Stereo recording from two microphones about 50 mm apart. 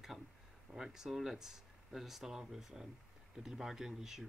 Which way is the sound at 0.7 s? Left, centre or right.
Centre.